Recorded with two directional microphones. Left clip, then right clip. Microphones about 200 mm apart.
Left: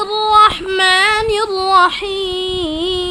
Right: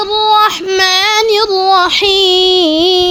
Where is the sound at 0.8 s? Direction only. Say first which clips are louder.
Right 1 dB; 35° right (ahead or behind).